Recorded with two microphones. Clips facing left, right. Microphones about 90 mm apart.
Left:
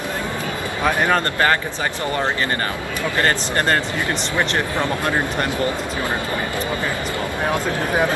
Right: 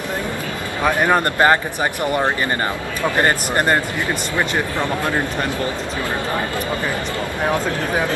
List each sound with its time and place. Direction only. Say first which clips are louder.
0.8 s speech: right 2 dB; 15° right (ahead or behind)
3.2 s speech: right 1 dB; 20° right (ahead or behind)